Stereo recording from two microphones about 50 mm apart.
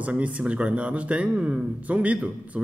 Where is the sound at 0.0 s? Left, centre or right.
Right.